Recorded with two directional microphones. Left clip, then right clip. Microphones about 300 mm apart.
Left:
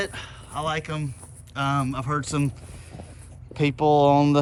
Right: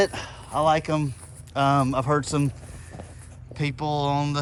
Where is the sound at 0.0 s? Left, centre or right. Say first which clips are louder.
Right 7 dB; centre.